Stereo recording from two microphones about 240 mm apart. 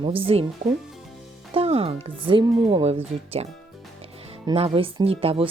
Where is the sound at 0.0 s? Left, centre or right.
Right.